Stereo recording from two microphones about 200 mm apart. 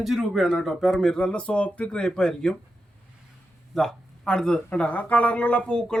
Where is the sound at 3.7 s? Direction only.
Centre (ahead or behind).